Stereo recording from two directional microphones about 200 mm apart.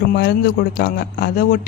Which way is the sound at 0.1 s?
55° left (ahead or behind).